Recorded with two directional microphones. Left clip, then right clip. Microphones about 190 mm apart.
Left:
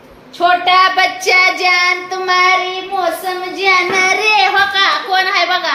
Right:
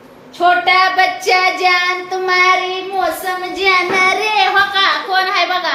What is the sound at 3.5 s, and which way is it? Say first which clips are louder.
Speech: left 1 dB; 10° left (ahead or behind).